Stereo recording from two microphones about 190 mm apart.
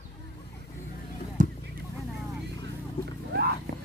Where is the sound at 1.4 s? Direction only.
40° right (ahead or behind).